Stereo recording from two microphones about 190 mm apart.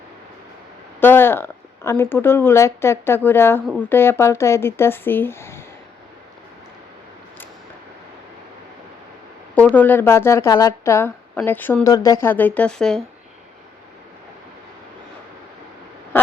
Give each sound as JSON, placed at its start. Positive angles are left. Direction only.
{"t": 0.9, "sound": "speech", "side_deg": 10}
{"t": 9.6, "sound": "speech", "side_deg": 10}